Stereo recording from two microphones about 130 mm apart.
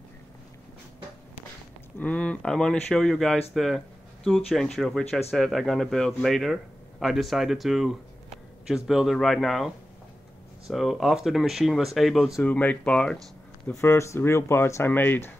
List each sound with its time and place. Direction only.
2.0 s speech: 10° left (ahead or behind)
3.5 s a sound: centre (ahead or behind)
4.5 s speech: centre (ahead or behind)
10.7 s speech: centre (ahead or behind)
12.4 s speech: 10° left (ahead or behind)
13.7 s speech: 20° left (ahead or behind)